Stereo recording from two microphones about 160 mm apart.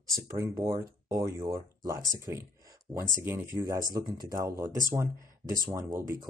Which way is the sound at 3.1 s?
15° right (ahead or behind).